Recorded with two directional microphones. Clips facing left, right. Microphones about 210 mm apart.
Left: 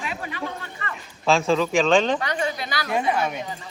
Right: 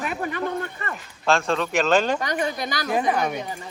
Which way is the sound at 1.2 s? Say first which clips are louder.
Left 2 dB; centre (ahead or behind).